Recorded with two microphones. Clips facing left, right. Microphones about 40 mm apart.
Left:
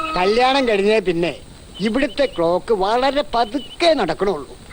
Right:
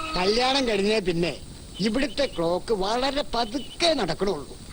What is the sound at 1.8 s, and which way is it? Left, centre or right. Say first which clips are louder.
Speech: left 6 dB; left.